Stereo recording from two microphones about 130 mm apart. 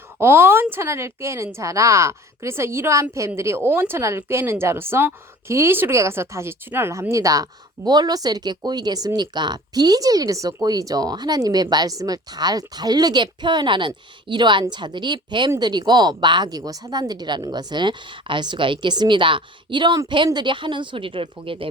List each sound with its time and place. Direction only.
0.2 s a woman's voice: 20° right (ahead or behind); by 21.7 s 45° right (ahead or behind)